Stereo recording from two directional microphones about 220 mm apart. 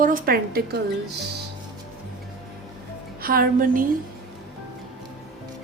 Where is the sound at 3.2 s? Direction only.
40° right (ahead or behind).